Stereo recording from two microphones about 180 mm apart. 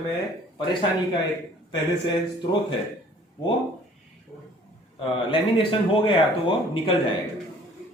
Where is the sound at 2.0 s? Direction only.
25° left (ahead or behind).